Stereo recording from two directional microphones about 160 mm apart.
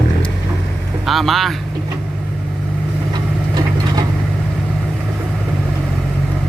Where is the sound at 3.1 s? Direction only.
25° right (ahead or behind).